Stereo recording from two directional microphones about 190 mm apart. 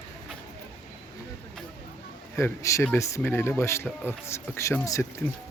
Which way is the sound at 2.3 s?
15° left (ahead or behind).